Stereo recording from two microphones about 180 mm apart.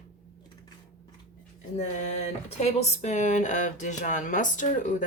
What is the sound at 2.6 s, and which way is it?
Speech, 40° left (ahead or behind).